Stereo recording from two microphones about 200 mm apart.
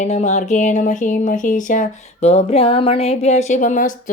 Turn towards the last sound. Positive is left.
turn(degrees=40)  # may be behind; listen again after turning